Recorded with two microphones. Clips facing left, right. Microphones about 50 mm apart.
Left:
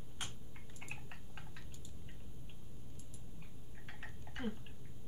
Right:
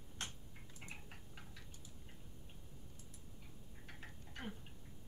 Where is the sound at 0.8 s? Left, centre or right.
Left.